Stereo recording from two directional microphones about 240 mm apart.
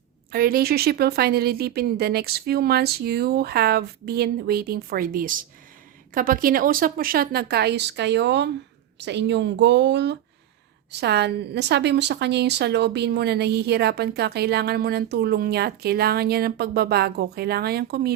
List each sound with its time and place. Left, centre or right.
0.3 s a woman's voice: right